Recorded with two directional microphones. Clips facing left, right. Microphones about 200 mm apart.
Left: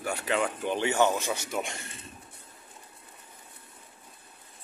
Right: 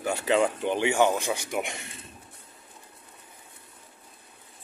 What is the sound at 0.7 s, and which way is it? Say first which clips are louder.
Speech: right 1 dB; 15° right (ahead or behind).